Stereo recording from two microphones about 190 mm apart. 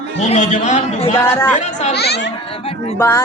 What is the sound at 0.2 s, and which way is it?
Speech, 40° left (ahead or behind).